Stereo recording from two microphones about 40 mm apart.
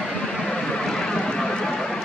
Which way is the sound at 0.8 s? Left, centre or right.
Centre.